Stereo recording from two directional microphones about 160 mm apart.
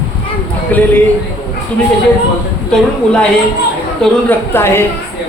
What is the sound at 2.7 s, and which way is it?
A man's voice, 5° left (ahead or behind).